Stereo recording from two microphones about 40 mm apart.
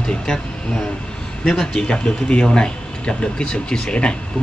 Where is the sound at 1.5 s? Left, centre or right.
Left.